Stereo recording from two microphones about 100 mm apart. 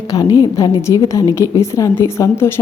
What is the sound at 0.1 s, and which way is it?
Speech, 40° left (ahead or behind).